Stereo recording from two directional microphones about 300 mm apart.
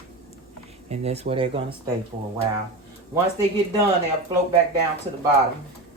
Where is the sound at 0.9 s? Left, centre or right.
Right.